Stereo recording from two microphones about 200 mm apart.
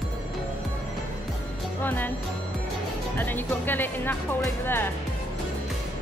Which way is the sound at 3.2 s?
10° left (ahead or behind).